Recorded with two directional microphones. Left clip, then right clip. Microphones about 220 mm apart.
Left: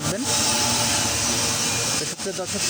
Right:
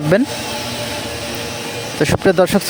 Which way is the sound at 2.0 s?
40° right (ahead or behind).